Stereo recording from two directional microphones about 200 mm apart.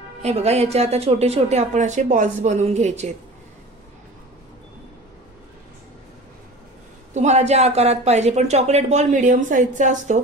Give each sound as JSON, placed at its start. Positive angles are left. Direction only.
{"t": 0.2, "sound": "speech", "side_deg": -30}
{"t": 7.2, "sound": "speech", "side_deg": -35}